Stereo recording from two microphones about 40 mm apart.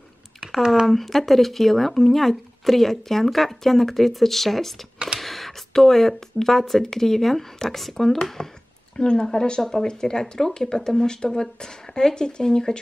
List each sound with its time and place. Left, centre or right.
0.8 s speech: centre
4.9 s a sound: centre
5.2 s speech: centre
8.9 s speech: left